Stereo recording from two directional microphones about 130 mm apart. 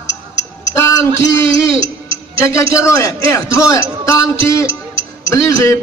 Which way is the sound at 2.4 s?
20° left (ahead or behind).